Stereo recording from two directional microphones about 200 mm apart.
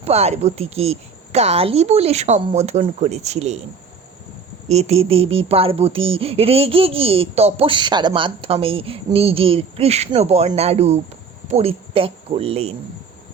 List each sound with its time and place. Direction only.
0.0 s speech: 30° right (ahead or behind)
4.7 s speech: 30° right (ahead or behind)